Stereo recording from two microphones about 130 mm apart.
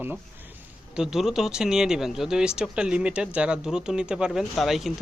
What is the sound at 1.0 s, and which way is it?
Speech, 5° right (ahead or behind).